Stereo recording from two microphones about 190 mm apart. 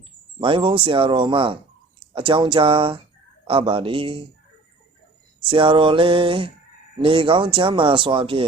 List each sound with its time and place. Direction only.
0.3 s speech: 30° right (ahead or behind)
5.5 s speech: 25° right (ahead or behind)